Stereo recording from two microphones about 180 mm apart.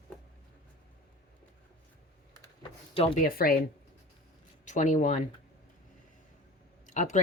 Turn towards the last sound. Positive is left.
turn(degrees=45)  # may be behind; listen again after turning